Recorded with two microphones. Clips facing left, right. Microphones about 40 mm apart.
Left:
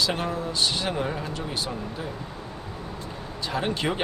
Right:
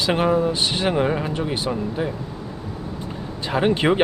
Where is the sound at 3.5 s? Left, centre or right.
Right.